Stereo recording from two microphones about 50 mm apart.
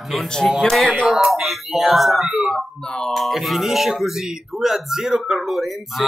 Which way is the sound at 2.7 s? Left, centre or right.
Centre.